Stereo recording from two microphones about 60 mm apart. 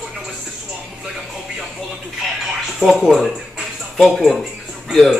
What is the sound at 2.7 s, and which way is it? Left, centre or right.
Speech, centre.